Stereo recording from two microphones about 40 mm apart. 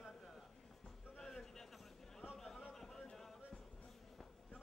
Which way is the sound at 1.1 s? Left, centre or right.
Centre.